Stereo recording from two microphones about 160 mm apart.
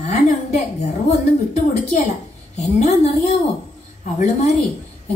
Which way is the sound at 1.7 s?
50° left (ahead or behind).